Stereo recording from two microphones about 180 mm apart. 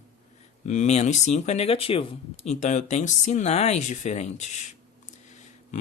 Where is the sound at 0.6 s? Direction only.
40° left (ahead or behind).